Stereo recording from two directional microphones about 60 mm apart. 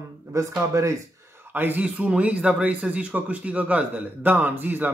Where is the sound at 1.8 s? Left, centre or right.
Right.